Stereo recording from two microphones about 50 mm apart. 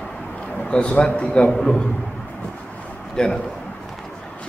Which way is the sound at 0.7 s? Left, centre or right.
Centre.